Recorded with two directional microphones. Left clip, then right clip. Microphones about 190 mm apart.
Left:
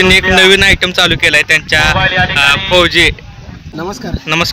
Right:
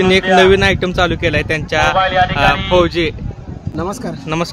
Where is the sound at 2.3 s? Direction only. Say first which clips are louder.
Left 3 dB; 5° right (ahead or behind).